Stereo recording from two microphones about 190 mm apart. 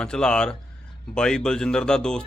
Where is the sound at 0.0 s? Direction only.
5° left (ahead or behind).